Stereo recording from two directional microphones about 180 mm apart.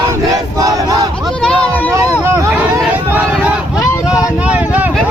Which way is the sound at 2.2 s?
15° right (ahead or behind).